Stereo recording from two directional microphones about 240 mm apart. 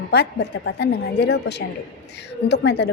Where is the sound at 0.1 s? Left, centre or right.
Left.